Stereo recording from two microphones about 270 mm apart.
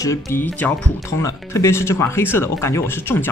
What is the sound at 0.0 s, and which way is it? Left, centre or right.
Speech, centre.